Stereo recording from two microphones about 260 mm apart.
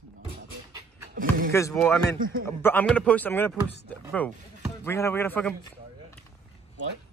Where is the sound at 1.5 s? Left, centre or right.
Centre.